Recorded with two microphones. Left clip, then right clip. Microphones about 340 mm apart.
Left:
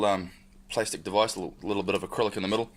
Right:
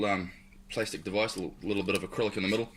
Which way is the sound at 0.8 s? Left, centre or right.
Centre.